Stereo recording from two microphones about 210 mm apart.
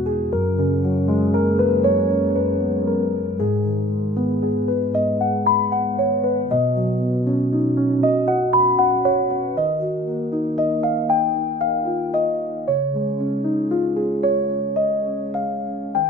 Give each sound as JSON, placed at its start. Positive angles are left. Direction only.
{"t": 1.8, "sound": "music", "side_deg": -30}
{"t": 8.5, "sound": "music", "side_deg": 0}